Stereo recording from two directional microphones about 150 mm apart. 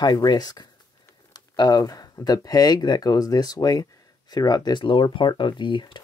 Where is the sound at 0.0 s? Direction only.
25° left (ahead or behind).